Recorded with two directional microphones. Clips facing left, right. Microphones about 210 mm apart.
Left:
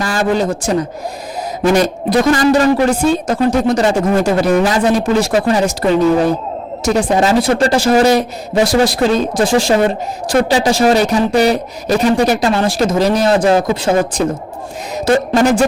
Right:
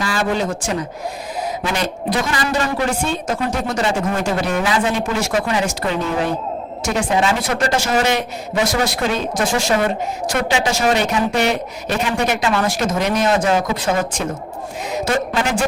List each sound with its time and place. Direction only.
0.0 s a man's voice: 45° left (ahead or behind)